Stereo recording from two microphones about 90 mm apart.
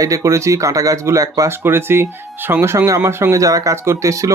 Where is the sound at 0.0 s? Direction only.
35° right (ahead or behind).